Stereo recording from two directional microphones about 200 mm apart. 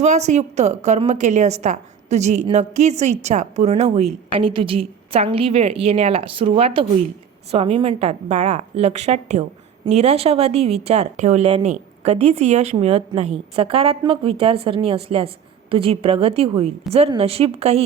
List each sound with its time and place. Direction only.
0.0 s a woman's voice: 35° right (ahead or behind)